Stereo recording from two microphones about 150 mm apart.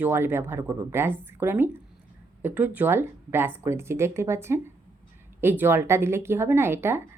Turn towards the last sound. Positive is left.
turn(degrees=-15)  # may be behind; listen again after turning